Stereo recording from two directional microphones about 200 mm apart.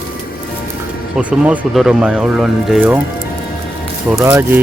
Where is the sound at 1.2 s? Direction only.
5° right (ahead or behind).